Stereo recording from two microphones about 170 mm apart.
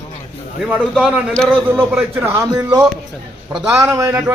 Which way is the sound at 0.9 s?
Centre (ahead or behind).